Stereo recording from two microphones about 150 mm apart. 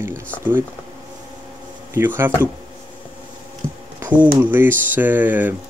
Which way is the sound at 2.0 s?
15° right (ahead or behind).